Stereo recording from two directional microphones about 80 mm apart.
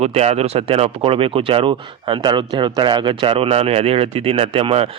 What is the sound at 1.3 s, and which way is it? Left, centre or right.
Speech, right.